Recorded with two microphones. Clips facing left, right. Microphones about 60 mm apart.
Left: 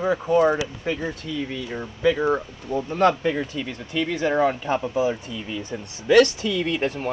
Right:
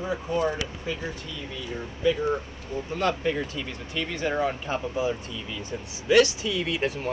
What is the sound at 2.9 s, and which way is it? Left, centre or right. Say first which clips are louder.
Speech: left 7 dB; left.